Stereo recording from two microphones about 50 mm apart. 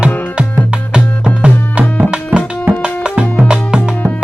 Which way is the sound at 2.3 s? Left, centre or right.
Right.